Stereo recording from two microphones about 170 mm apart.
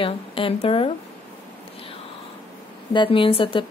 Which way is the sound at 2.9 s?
30° left (ahead or behind).